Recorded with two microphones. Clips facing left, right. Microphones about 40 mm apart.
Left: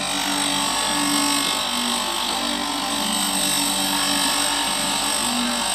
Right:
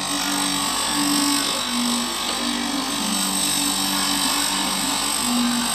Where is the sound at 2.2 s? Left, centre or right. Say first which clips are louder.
Even; centre.